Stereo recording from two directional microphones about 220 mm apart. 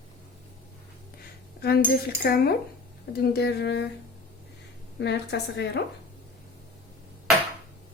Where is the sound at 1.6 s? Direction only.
45° left (ahead or behind).